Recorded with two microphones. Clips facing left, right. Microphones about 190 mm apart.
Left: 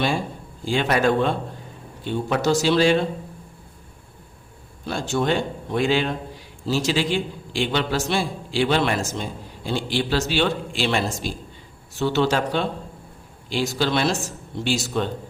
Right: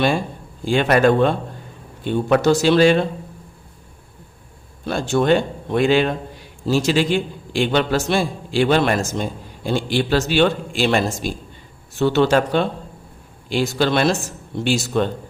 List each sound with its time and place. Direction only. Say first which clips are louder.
0.6 s speech: right 5 dB; 55° right (ahead or behind)
4.9 s a man's voice: right 6 dB; 60° right (ahead or behind)